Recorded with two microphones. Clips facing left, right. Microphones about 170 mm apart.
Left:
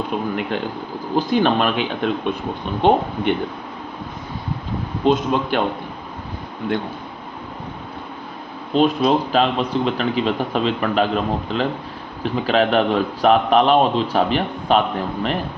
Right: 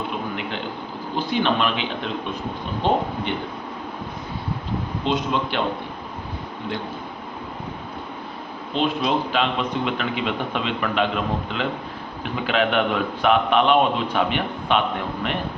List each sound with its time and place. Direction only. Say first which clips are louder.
1.1 s speech: left 5 dB; 45° left (ahead or behind)
2.8 s speech: left 6 dB; 65° left (ahead or behind)
5.0 s speech: left 6 dB; 45° left (ahead or behind)
8.7 s a man's voice: left 6 dB; 40° left (ahead or behind)